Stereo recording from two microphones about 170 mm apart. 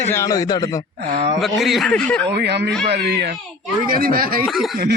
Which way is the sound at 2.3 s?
75° right (ahead or behind).